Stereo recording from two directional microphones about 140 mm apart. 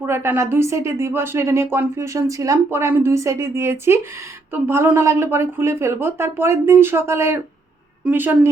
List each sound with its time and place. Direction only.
0.0 s speech: 20° right (ahead or behind)